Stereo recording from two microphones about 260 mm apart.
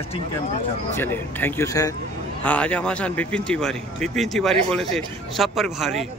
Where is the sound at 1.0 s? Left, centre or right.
Centre.